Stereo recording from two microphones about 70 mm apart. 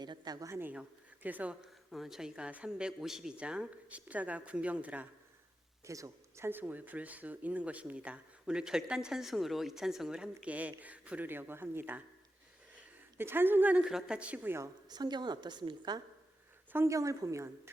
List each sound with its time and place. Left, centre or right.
0.0 s a woman's voice: right
0.7 s speech: right
1.9 s speech: centre; by 5.0 s right
5.8 s a sound: right
6.4 s speech: right
11.3 s speech: right
13.1 s a woman's voice: right
13.8 s speech: centre
14.8 s a woman's voice: right
16.7 s a woman's voice: right